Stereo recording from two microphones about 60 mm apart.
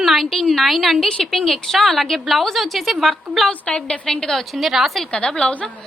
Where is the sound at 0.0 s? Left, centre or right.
Centre.